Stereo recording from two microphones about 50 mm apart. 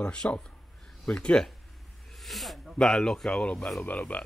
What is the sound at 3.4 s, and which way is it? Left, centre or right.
Speech, left.